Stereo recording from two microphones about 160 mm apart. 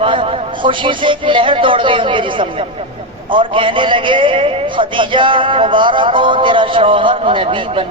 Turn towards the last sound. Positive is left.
turn(degrees=-35)  # may be behind; listen again after turning